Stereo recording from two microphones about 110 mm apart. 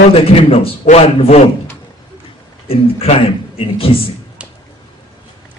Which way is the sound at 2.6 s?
60° left (ahead or behind).